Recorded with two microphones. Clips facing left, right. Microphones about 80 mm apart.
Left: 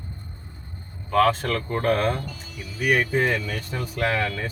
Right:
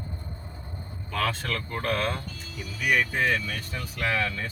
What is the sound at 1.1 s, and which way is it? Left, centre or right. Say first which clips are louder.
Speech: left 9 dB; left.